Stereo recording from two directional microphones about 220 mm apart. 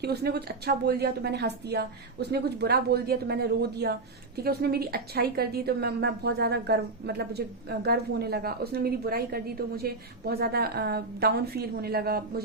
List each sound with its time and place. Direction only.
0.0 s a woman's voice: 45° right (ahead or behind)